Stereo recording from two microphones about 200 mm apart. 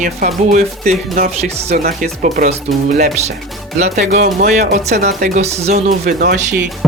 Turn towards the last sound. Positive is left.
turn(degrees=-60)  # may be behind; listen again after turning